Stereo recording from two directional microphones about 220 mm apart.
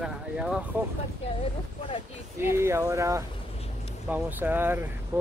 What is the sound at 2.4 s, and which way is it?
Speech, 10° right (ahead or behind).